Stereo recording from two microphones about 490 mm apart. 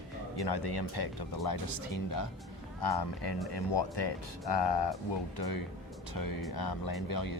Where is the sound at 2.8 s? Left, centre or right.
Left.